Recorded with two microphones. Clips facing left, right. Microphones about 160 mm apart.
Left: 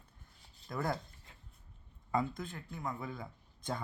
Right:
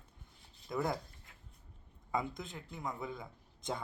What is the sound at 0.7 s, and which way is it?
Speech, 10° right (ahead or behind).